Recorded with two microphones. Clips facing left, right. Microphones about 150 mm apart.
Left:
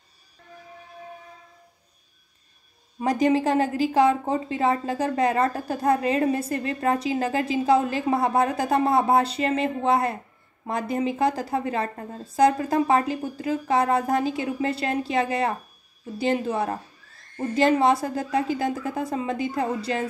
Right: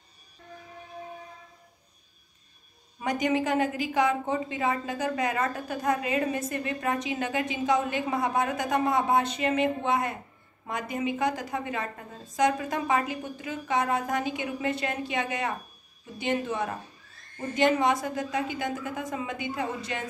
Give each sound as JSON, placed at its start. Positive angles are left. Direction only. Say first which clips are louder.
{"t": 3.0, "sound": "a woman's voice", "louder": "left 5 dB", "side_deg": 35}